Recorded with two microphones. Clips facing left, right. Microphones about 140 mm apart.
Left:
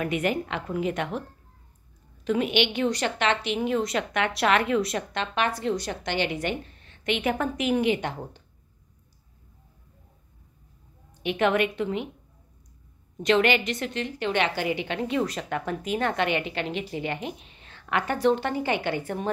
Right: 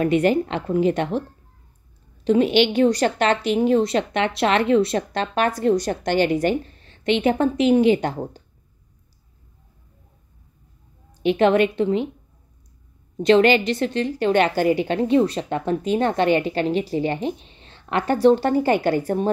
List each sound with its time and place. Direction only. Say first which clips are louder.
0.0 s a woman's voice: right 8 dB; 30° right (ahead or behind)
2.2 s a woman's voice: right 7 dB; 30° right (ahead or behind)
11.2 s a woman's voice: right 7 dB; 30° right (ahead or behind)
13.2 s a woman's voice: right 7 dB; 35° right (ahead or behind)